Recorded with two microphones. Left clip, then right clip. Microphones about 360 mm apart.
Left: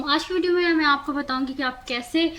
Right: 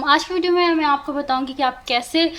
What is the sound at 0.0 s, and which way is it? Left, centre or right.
A woman's voice, centre.